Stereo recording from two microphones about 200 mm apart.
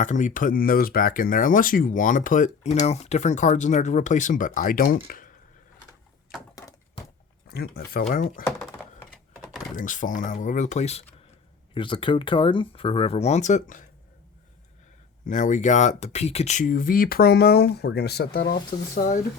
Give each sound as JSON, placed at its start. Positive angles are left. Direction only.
{"t": 0.0, "sound": "speech", "side_deg": 40}
{"t": 6.6, "sound": "a sound", "side_deg": 15}
{"t": 7.4, "sound": "speech", "side_deg": 50}
{"t": 8.0, "sound": "speech", "side_deg": 40}
{"t": 9.3, "sound": "power windows", "side_deg": -5}
{"t": 9.7, "sound": "speech", "side_deg": 40}
{"t": 15.3, "sound": "speech", "side_deg": 40}